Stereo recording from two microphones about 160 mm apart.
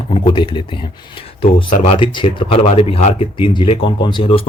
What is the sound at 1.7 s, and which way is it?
Speech, 45° left (ahead or behind).